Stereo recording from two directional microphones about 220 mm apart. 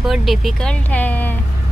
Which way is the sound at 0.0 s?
Centre (ahead or behind).